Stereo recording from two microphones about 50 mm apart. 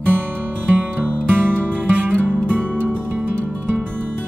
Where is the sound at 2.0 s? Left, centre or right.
Right.